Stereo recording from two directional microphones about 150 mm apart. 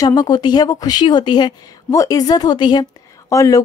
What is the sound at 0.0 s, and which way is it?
Speech, 25° left (ahead or behind).